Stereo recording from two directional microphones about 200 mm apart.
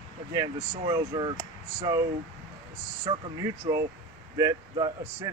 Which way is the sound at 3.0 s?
15° right (ahead or behind).